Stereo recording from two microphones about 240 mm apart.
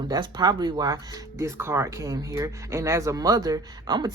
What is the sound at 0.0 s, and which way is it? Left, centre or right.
Speech, centre.